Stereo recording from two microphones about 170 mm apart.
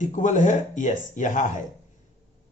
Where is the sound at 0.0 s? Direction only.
45° left (ahead or behind).